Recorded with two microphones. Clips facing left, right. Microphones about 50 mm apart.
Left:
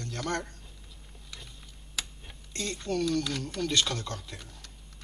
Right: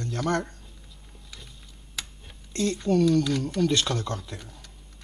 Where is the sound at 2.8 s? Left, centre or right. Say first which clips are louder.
Right 7 dB; centre.